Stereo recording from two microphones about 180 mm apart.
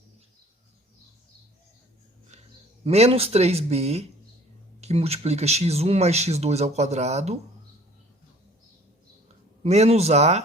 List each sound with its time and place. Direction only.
2.3 s a sound: 40° right (ahead or behind)
2.8 s speech: 35° right (ahead or behind)
9.6 s speech: 35° right (ahead or behind)